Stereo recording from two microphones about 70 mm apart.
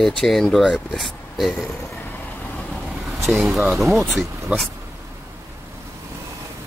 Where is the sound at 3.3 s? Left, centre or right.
Centre.